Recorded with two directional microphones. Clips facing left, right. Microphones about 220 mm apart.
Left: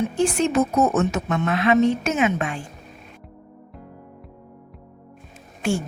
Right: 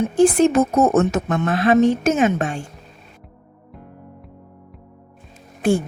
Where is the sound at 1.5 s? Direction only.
40° right (ahead or behind).